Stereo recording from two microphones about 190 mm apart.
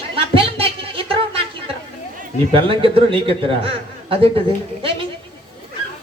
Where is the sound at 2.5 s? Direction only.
30° right (ahead or behind).